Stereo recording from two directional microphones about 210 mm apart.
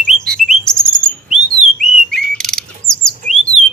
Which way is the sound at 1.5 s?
35° right (ahead or behind).